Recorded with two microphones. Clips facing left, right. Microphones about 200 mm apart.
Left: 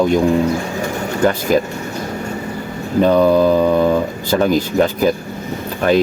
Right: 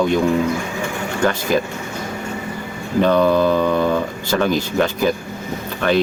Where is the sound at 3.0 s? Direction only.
40° left (ahead or behind).